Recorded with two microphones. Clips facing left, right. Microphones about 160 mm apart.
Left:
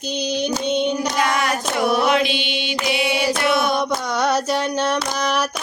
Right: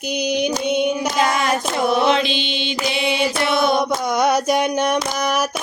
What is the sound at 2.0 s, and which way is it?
Mantra, 30° right (ahead or behind).